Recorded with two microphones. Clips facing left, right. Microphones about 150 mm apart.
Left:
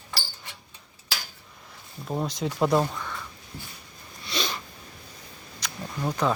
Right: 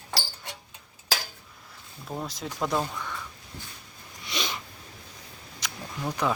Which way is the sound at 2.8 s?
15° left (ahead or behind).